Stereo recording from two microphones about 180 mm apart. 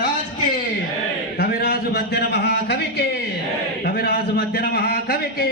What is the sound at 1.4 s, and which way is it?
A man's voice, 60° left (ahead or behind).